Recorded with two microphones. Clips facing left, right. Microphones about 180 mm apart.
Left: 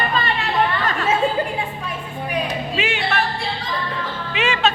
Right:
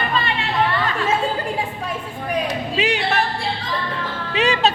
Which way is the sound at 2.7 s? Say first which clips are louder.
Right 3 dB; 35° right (ahead or behind).